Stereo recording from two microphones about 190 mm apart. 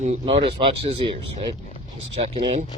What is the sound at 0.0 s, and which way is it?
Speech, 35° right (ahead or behind).